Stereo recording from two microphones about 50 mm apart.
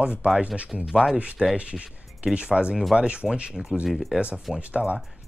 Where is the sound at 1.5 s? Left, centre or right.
Right.